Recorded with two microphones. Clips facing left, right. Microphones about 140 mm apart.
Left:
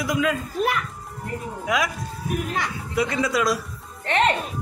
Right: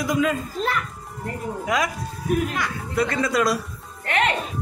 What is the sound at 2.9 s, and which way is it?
Speech, 10° left (ahead or behind).